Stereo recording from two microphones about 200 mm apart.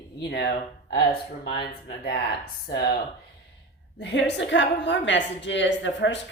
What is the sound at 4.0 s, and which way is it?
A woman's voice, 60° left (ahead or behind).